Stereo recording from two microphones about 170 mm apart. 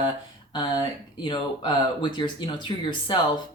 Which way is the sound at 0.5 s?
25° left (ahead or behind).